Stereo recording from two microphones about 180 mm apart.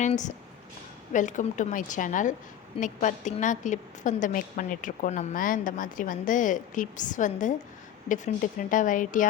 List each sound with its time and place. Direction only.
0.0 s a woman's voice: 45° left (ahead or behind)